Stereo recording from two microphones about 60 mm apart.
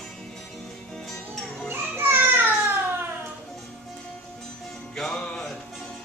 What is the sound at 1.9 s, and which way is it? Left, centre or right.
Baby cry, right.